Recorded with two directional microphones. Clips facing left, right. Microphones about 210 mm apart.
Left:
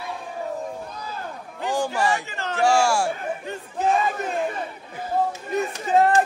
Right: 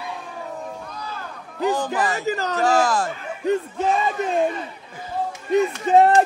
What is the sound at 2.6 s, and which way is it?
Speech, 10° left (ahead or behind).